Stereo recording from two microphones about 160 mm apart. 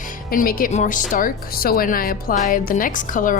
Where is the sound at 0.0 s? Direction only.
60° left (ahead or behind).